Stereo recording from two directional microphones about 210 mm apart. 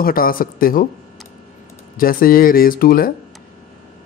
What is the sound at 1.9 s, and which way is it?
Speech, 45° left (ahead or behind).